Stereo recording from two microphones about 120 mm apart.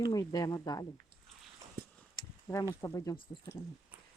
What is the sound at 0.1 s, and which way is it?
Speech, 30° left (ahead or behind).